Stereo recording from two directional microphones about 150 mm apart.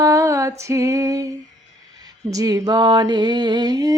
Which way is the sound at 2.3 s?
25° right (ahead or behind).